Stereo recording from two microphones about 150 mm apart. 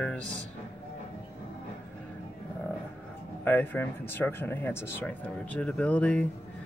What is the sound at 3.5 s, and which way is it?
Speech, 15° left (ahead or behind).